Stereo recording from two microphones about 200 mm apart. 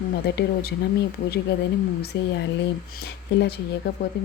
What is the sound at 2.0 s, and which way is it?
A woman's voice, 55° left (ahead or behind).